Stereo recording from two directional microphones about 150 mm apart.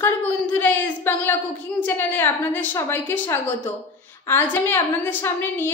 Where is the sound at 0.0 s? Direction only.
10° left (ahead or behind).